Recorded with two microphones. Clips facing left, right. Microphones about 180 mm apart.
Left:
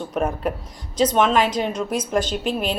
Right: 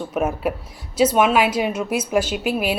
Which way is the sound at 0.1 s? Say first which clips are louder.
Right 1 dB; 5° right (ahead or behind).